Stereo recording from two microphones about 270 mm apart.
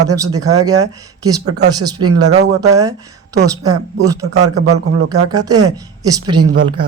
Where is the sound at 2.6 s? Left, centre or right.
Centre.